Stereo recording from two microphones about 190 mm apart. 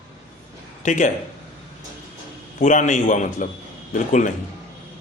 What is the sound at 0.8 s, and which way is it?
Speech, 40° left (ahead or behind).